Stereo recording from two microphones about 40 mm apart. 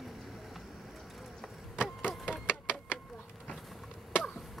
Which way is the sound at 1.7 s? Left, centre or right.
Right.